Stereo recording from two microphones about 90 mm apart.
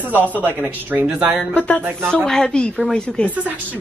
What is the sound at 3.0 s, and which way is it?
Speech, 10° left (ahead or behind).